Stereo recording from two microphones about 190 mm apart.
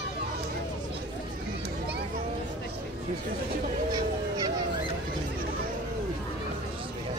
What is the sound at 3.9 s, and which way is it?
Goose, 20° right (ahead or behind).